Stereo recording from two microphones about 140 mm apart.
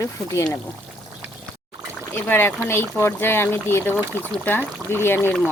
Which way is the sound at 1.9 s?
15° left (ahead or behind).